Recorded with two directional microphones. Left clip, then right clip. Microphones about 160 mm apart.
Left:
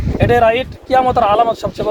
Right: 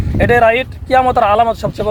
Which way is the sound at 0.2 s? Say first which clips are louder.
Right 2 dB; 15° left (ahead or behind).